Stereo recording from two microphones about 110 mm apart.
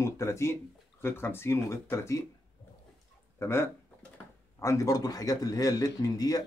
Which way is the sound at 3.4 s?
25° left (ahead or behind).